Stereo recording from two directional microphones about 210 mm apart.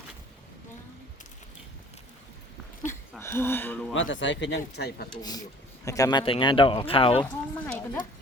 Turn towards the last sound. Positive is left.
turn(degrees=5)  # may be behind; listen again after turning